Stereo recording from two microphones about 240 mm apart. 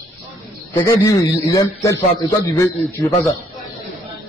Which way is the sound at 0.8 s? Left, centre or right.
Centre.